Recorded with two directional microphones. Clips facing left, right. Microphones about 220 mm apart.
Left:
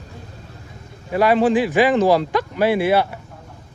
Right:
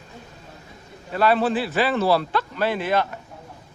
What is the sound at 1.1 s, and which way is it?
A man's voice, 15° left (ahead or behind).